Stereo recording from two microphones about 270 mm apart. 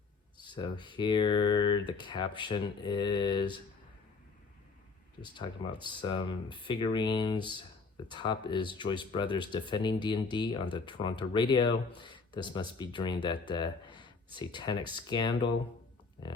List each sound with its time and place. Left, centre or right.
0.5 s speech: centre
5.2 s speech: centre